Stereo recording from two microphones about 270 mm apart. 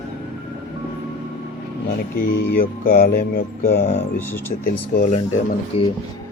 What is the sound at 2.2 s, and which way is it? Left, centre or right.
Speech, left.